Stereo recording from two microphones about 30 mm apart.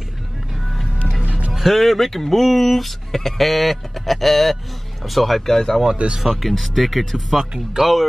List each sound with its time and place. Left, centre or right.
1.2 s music: right
1.5 s speech: centre
5.5 s speech: centre
6.0 s speech: right
6.5 s speech: centre